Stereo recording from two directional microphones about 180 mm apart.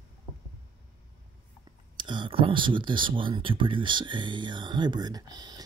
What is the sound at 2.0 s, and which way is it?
Speech, 25° right (ahead or behind).